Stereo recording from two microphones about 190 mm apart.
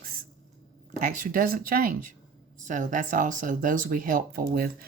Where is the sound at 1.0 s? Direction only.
45° right (ahead or behind).